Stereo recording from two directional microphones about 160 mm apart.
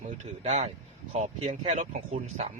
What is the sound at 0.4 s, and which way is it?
Speech, 45° right (ahead or behind).